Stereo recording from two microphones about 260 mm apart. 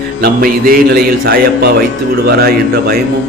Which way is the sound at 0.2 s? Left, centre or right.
Right.